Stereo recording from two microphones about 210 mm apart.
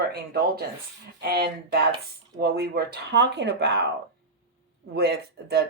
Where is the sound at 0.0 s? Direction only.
50° right (ahead or behind).